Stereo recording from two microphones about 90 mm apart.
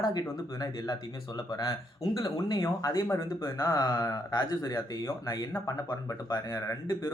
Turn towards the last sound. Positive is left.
turn(degrees=35)  # may be behind; listen again after turning